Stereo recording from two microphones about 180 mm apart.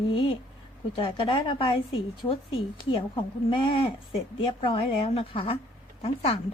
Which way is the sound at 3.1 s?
25° left (ahead or behind).